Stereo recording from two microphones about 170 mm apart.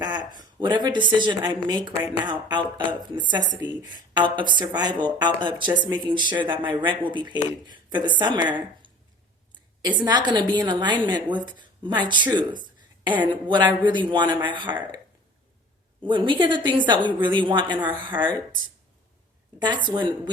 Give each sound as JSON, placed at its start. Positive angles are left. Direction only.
{"t": 0.3, "sound": "a woman's voice", "side_deg": -25}
{"t": 3.6, "sound": "speech", "side_deg": -10}
{"t": 3.8, "sound": "a woman's voice", "side_deg": -25}
{"t": 10.0, "sound": "a woman's voice", "side_deg": -25}
{"t": 16.0, "sound": "a woman's voice", "side_deg": -30}
{"t": 19.5, "sound": "a woman's voice", "side_deg": -25}